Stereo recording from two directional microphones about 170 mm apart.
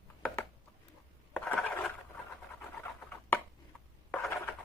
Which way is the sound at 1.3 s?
5° left (ahead or behind).